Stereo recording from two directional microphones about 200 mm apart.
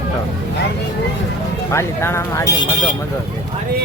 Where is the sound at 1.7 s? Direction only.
15° left (ahead or behind).